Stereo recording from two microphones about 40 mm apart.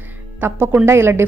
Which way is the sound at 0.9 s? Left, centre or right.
Right.